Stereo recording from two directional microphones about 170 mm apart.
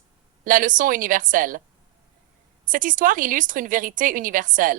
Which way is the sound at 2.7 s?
50° right (ahead or behind).